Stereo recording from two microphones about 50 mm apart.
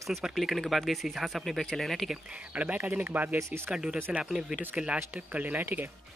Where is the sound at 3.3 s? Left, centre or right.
Right.